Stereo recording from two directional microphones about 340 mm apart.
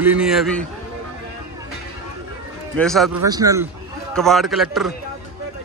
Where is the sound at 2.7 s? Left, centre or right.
Centre.